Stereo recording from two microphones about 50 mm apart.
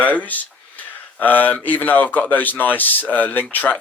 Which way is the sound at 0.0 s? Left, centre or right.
Left.